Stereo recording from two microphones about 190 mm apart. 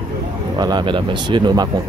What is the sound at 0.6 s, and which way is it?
Speech, 20° right (ahead or behind).